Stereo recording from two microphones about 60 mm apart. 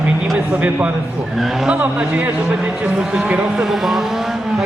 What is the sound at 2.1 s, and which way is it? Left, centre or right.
A man's voice, right.